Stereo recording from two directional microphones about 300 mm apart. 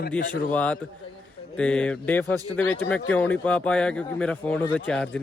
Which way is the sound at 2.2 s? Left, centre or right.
Centre.